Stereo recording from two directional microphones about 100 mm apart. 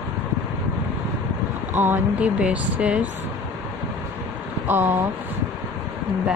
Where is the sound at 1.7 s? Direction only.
20° right (ahead or behind).